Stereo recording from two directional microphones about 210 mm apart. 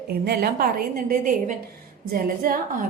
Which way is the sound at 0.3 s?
45° right (ahead or behind).